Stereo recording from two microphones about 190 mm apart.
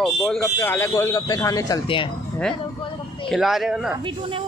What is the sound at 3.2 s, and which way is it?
Speech, centre (ahead or behind).